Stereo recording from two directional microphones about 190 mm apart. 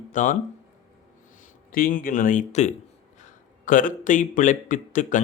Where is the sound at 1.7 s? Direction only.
50° left (ahead or behind).